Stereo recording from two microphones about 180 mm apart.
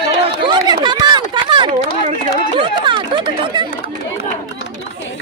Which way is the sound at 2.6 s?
25° right (ahead or behind).